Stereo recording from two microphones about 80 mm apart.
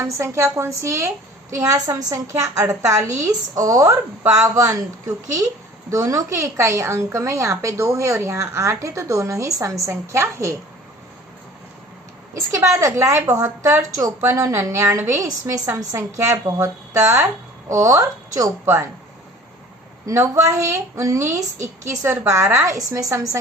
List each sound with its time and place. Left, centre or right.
0.0 s a woman's voice: right
2.0 s a woman's voice: right
12.5 s a woman's voice: right
13.6 s a woman's voice: right
14.3 s a woman's voice: right
16.0 s a woman's voice: right
18.6 s a woman's voice: right
20.1 s a woman's voice: right